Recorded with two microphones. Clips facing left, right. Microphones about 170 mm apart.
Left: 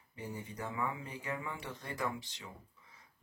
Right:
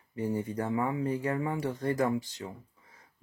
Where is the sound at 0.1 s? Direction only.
45° right (ahead or behind).